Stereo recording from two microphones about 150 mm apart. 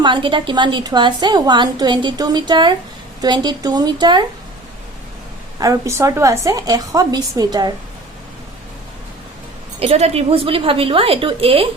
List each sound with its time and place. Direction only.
0.0 s a woman's voice: 35° right (ahead or behind)
5.5 s a woman's voice: 20° right (ahead or behind)
9.8 s a woman's voice: 45° right (ahead or behind)